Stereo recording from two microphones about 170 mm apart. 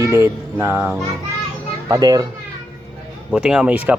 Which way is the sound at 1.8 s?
20° right (ahead or behind).